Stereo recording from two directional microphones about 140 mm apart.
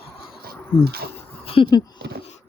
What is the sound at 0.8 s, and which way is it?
Speech, 90° right.